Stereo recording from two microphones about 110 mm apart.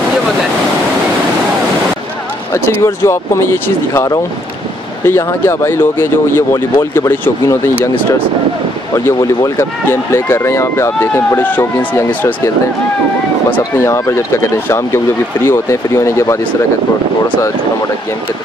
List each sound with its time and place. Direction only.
2.5 s speech: 25° left (ahead or behind)
8.9 s speech: 30° left (ahead or behind); by 12.4 s 15° left (ahead or behind)
13.5 s speech: 25° left (ahead or behind)